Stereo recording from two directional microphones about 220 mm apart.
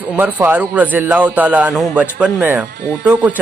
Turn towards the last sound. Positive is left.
turn(degrees=-5)  # may be behind; listen again after turning